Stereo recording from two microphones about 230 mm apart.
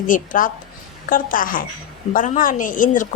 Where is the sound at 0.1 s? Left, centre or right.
Left.